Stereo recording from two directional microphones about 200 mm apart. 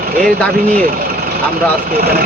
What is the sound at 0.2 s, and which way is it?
Speech, 5° left (ahead or behind).